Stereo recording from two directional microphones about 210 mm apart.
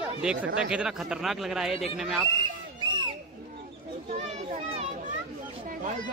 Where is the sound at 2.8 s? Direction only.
20° right (ahead or behind).